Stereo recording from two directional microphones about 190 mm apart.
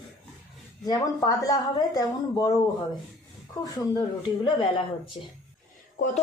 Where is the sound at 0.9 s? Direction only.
20° left (ahead or behind).